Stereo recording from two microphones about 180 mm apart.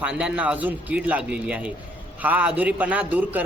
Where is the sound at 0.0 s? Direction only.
5° right (ahead or behind).